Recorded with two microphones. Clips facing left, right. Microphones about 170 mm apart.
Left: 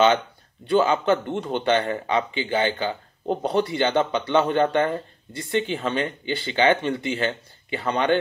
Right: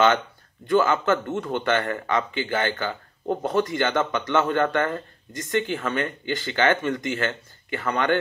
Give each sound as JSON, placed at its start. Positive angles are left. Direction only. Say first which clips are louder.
{"t": 0.7, "sound": "speech", "louder": "left 1 dB", "side_deg": 20}